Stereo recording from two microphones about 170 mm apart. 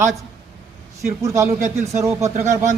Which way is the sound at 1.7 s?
40° right (ahead or behind).